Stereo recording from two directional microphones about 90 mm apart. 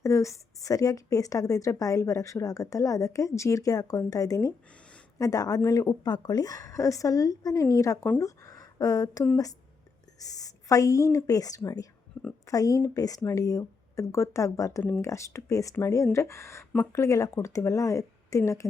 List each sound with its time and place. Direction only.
0.0 s speech: 35° left (ahead or behind)